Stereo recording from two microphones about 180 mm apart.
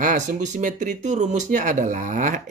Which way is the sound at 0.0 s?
45° right (ahead or behind).